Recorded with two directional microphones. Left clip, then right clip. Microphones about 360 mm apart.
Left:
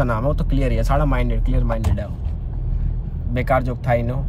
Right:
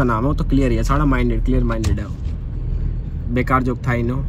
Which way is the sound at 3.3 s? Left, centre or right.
Centre.